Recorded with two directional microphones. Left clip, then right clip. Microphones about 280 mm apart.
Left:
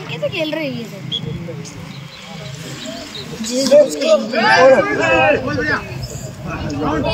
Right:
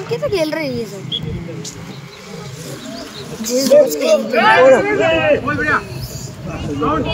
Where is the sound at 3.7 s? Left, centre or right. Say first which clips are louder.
Even; centre.